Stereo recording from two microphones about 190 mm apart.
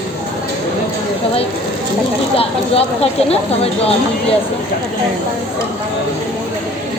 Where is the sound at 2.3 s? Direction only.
30° left (ahead or behind).